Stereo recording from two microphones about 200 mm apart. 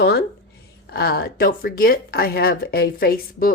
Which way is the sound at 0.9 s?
50° left (ahead or behind).